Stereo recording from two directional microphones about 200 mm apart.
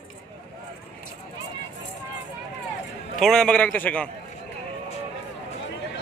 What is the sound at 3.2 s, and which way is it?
Speech, centre (ahead or behind).